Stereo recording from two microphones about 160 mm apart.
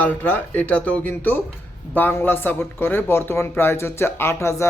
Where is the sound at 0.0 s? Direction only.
10° left (ahead or behind).